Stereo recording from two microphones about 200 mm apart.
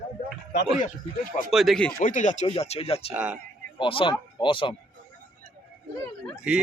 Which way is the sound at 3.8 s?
25° left (ahead or behind).